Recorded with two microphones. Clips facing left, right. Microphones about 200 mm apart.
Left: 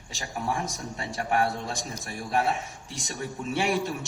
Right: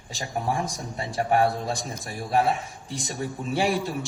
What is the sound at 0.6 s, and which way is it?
A man's voice, 35° right (ahead or behind).